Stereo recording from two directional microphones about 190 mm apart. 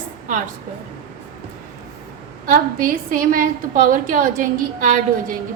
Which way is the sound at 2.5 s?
45° right (ahead or behind).